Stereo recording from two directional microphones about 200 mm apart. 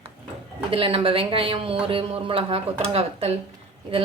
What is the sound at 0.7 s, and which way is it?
Speech, 25° right (ahead or behind).